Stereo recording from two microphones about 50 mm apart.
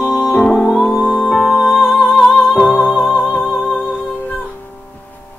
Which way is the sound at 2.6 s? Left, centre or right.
Centre.